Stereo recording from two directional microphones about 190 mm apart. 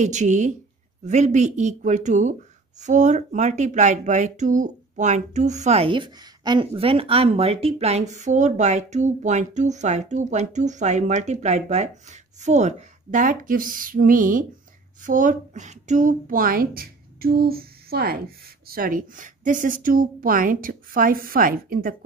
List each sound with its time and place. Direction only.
0.0 s a woman's voice: 40° right (ahead or behind)